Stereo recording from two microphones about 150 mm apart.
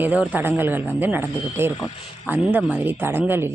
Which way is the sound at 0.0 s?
10° right (ahead or behind).